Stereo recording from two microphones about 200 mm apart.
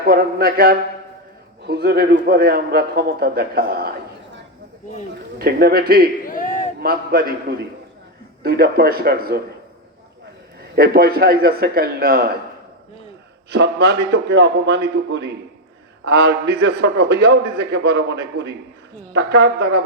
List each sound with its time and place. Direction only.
0.0 s a man's voice: 50° right (ahead or behind)
5.1 s a man's voice: 50° right (ahead or behind)
6.2 s a sound: 45° left (ahead or behind)
6.8 s a man's voice: 50° right (ahead or behind)
8.4 s a man's voice: 50° right (ahead or behind)
10.6 s a man's voice: 50° right (ahead or behind)
13.5 s a man's voice: 55° right (ahead or behind)